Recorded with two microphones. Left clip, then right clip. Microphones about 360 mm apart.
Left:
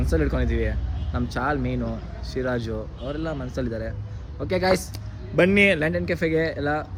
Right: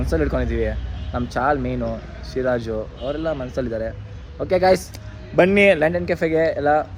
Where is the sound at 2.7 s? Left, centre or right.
Right.